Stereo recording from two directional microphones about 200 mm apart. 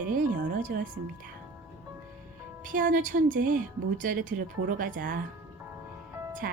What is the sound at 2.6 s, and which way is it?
Speech, 40° right (ahead or behind).